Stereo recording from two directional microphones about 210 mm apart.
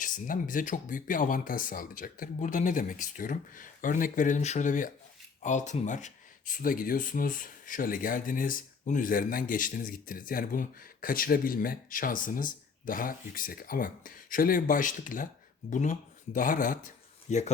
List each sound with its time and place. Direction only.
0.0 s speech: 40° left (ahead or behind)